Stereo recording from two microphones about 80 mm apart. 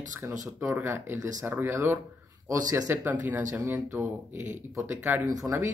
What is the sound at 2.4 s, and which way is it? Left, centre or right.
Speech, right.